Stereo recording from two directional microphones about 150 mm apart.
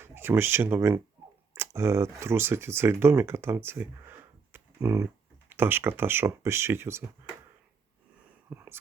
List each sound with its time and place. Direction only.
0.0 s speech: 15° right (ahead or behind)
8.4 s whispering: 15° right (ahead or behind)